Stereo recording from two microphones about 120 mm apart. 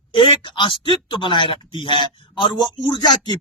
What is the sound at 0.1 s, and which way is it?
A man's voice, 40° left (ahead or behind).